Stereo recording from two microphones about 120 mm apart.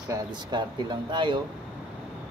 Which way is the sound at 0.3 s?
40° right (ahead or behind).